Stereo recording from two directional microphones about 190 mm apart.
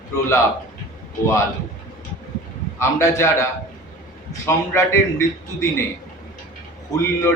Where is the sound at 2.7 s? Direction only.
15° left (ahead or behind).